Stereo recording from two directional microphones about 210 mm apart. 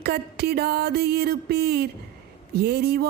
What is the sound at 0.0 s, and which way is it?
Speech, 50° right (ahead or behind).